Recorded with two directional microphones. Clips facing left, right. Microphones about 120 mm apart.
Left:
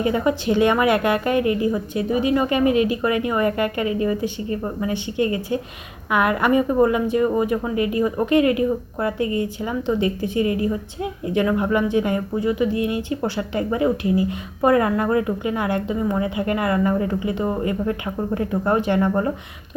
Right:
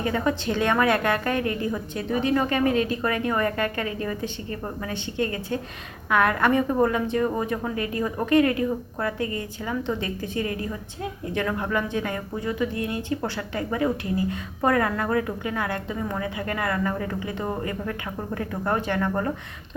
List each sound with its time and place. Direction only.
0.0 s a woman's voice: 15° left (ahead or behind)